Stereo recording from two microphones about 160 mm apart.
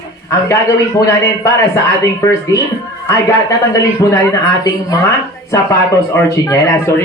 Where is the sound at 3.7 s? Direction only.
20° left (ahead or behind).